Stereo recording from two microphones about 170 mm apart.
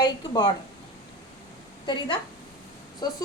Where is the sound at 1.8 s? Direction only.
25° left (ahead or behind).